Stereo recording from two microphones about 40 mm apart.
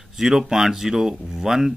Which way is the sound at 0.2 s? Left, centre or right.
Centre.